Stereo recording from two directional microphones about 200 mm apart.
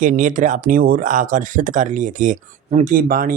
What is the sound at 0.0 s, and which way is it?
Speech, 40° right (ahead or behind).